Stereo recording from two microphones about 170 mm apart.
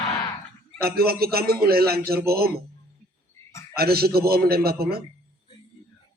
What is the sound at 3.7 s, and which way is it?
A man's voice, 65° right (ahead or behind).